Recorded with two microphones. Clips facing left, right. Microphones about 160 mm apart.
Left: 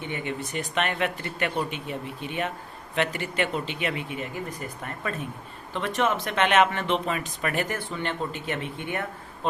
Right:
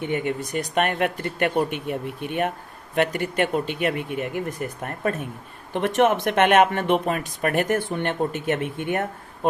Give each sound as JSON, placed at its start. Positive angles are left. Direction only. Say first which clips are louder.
{"t": 0.0, "sound": "speech", "louder": "right 6 dB", "side_deg": -45}